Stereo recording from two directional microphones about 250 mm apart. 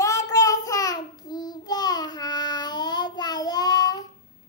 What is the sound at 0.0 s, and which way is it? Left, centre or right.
Child singing, centre.